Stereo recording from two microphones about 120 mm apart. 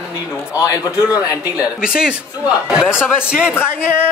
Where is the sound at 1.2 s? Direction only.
10° right (ahead or behind).